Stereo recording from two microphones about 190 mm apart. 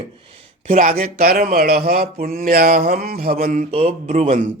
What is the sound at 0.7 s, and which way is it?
Speech, 45° right (ahead or behind).